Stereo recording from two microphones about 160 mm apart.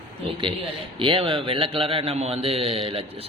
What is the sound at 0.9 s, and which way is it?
A man's voice, 35° right (ahead or behind).